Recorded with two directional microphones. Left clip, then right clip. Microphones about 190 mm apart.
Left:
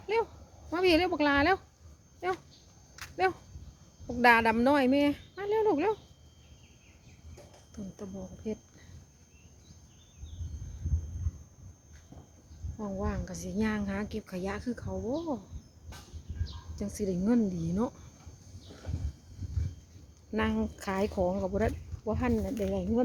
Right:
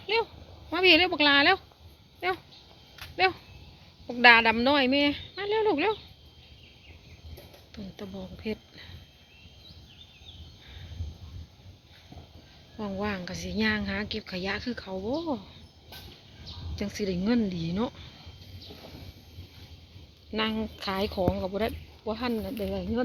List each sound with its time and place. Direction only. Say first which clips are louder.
0.7 s speech: right 5 dB; 10° left (ahead or behind)
4.0 s speech: right 5 dB; 10° left (ahead or behind)
7.9 s speech: right 4 dB; centre (ahead or behind)
12.7 s a woman's voice: right 4 dB; 20° right (ahead or behind)
13.2 s speech: right 5 dB; centre (ahead or behind)
16.7 s speech: right 2 dB; centre (ahead or behind)
20.3 s speech: right 2 dB; 10° left (ahead or behind)